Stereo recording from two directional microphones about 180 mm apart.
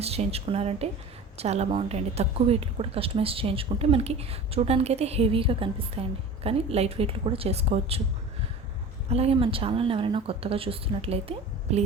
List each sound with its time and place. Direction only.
0.0 s a woman's voice: 35° right (ahead or behind)
9.0 s a woman's voice: 35° right (ahead or behind)